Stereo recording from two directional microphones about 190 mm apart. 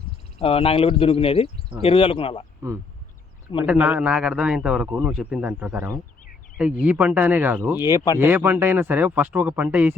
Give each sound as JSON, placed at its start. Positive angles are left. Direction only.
{"t": 0.3, "sound": "speech", "side_deg": 30}
{"t": 3.6, "sound": "a man's voice", "side_deg": -10}
{"t": 7.9, "sound": "speech", "side_deg": 20}
{"t": 8.2, "sound": "speech", "side_deg": -10}